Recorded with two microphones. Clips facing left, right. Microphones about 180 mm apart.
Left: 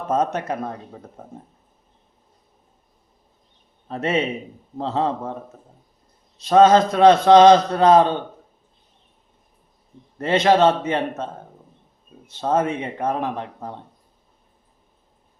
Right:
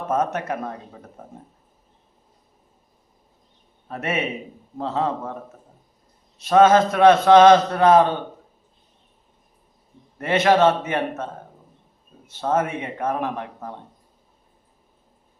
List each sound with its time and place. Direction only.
0.1 s a man's voice: 20° left (ahead or behind)
3.8 s a man's voice: 25° left (ahead or behind)
6.5 s a man's voice: 15° left (ahead or behind)
10.2 s a man's voice: 15° left (ahead or behind)
12.4 s a man's voice: 15° left (ahead or behind)